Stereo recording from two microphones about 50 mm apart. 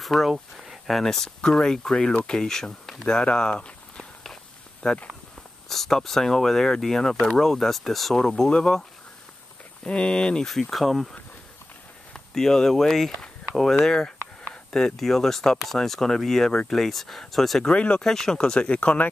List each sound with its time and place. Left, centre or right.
0.0 s speech: centre
3.2 s walk: centre
4.8 s speech: left
5.7 s speech: centre
9.8 s speech: centre
10.5 s speech: centre
17.6 s speech: left
18.0 s speech: centre; by 19.0 s left